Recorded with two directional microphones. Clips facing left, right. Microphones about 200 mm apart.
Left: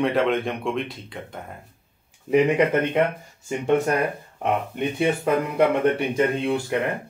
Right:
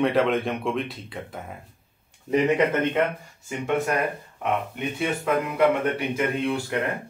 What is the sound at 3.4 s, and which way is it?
Speech, 30° left (ahead or behind).